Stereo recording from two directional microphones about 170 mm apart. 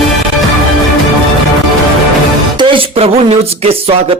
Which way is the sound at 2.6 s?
30° right (ahead or behind).